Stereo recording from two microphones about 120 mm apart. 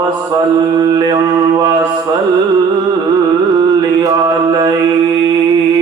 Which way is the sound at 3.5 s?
30° right (ahead or behind).